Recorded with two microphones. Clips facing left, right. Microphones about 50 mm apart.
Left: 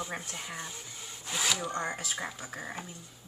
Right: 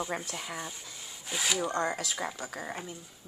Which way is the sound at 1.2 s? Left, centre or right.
Centre.